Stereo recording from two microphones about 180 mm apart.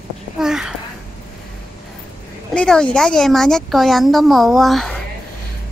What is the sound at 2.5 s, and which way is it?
Speech, 5° left (ahead or behind).